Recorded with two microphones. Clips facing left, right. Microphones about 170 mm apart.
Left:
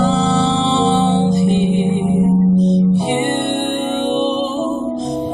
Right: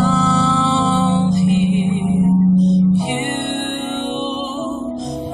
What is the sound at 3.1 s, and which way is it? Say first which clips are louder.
Music: left 4 dB; 30° left (ahead or behind).